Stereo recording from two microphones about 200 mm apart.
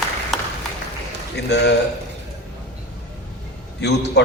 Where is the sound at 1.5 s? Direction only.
60° left (ahead or behind).